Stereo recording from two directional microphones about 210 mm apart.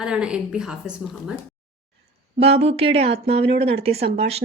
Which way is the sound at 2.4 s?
30° right (ahead or behind).